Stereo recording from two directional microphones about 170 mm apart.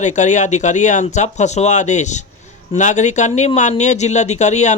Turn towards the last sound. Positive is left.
turn(degrees=45)  # may be behind; listen again after turning